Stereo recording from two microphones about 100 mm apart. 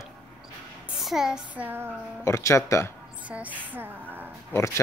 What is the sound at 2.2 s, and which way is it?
Speech, 30° left (ahead or behind).